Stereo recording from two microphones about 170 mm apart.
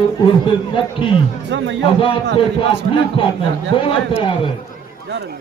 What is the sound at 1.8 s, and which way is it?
Speech, 30° left (ahead or behind).